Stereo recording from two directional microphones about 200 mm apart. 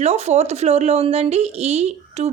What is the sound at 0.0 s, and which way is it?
A woman's voice, 35° right (ahead or behind).